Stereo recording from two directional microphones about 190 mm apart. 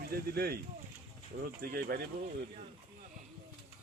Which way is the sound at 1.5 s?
50° right (ahead or behind).